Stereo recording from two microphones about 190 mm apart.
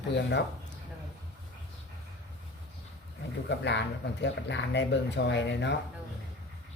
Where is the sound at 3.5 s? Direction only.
65° left (ahead or behind).